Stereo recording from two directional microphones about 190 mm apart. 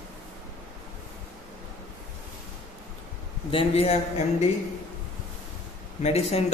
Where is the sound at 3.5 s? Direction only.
30° left (ahead or behind).